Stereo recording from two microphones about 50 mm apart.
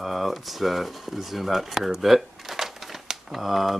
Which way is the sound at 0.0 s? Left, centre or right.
Centre.